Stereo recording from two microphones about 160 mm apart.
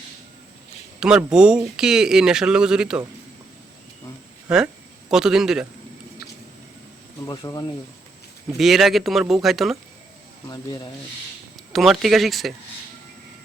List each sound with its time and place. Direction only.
0.9 s speech: 5° right (ahead or behind)
4.4 s speech: 5° right (ahead or behind)
7.3 s speech: 20° left (ahead or behind)
8.5 s speech: centre (ahead or behind)
10.4 s speech: 20° left (ahead or behind)
11.7 s speech: centre (ahead or behind)